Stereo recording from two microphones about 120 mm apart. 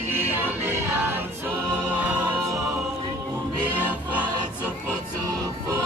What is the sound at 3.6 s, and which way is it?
Music, 15° right (ahead or behind).